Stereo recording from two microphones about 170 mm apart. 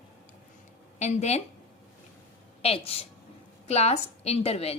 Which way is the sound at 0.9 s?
40° left (ahead or behind).